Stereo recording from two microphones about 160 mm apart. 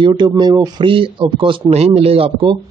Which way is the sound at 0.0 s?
30° right (ahead or behind).